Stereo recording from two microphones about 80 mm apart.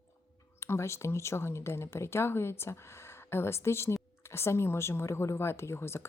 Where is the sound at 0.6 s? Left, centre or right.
Left.